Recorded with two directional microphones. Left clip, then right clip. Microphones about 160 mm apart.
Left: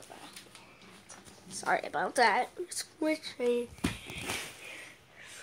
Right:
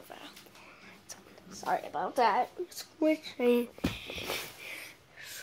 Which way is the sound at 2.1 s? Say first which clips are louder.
Even; centre (ahead or behind).